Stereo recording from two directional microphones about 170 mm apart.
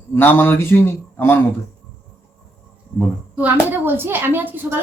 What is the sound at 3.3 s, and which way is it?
Speech, 10° right (ahead or behind).